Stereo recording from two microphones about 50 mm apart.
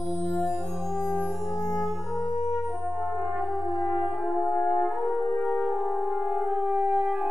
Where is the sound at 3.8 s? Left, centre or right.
Left.